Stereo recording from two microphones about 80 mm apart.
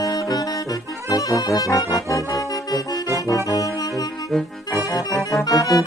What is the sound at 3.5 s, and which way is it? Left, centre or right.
Brass instrument, left.